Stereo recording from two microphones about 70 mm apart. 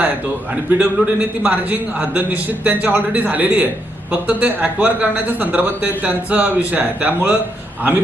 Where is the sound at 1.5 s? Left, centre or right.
Right.